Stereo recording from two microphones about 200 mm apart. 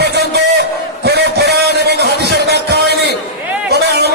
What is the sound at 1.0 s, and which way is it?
Music, 55° right (ahead or behind).